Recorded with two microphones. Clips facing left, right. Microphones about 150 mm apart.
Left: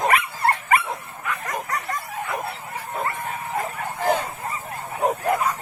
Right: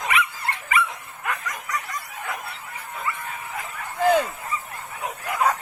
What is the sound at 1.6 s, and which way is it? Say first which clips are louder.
Bow-wow: left 3 dB; 55° left (ahead or behind).